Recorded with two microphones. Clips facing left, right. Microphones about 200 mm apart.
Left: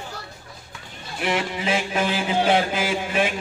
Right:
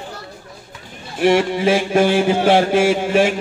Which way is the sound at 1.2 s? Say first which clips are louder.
Right 10 dB; 50° right (ahead or behind).